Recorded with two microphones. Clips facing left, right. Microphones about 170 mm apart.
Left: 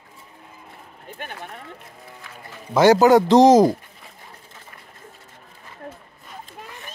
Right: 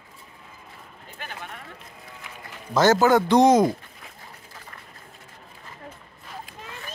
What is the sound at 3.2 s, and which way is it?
Speech, 90° left.